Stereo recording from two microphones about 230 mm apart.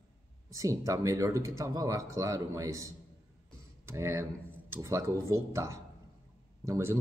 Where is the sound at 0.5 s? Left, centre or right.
Centre.